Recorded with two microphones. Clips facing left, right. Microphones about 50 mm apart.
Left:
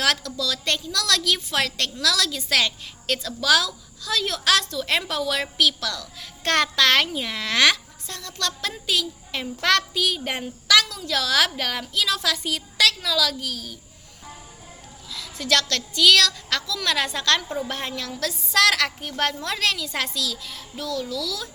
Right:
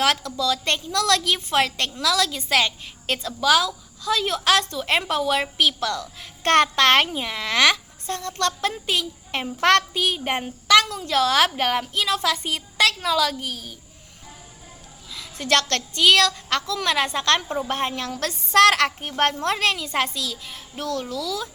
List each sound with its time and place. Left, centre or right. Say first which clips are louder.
0.0 s a woman's voice: right 2 dB; right
7.2 s speech: right 1 dB; centre
8.0 s a woman's voice: right 6 dB; right
9.9 s a woman's voice: right 2 dB; right
15.1 s a sound: even; right
15.4 s a woman's voice: right 2 dB; right
18.2 s a woman's voice: right 4 dB; right
20.7 s a woman's voice: right 1 dB; right
21.2 s a woman's voice: right 3 dB; right